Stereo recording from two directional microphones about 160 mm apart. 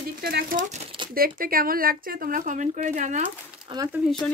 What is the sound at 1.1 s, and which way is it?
Speech, 65° right (ahead or behind).